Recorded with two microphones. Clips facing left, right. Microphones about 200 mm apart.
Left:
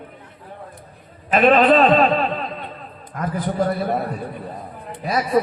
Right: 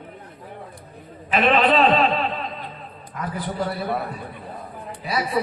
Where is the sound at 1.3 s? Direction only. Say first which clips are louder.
Left 4 dB; 45° left (ahead or behind).